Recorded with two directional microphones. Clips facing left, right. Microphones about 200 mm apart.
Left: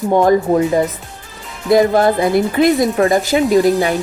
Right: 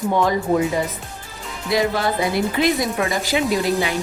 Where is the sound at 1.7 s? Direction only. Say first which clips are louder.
Left 9 dB; 50° left (ahead or behind).